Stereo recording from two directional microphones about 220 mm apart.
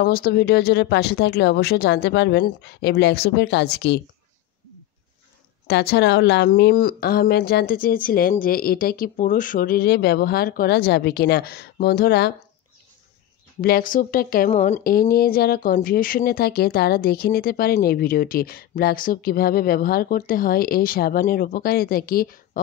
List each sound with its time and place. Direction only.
0.0 s a woman's voice: 45° left (ahead or behind)
5.7 s a woman's voice: 50° left (ahead or behind)
13.6 s speech: 40° left (ahead or behind)